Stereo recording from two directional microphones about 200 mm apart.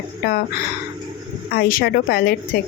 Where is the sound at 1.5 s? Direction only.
50° left (ahead or behind).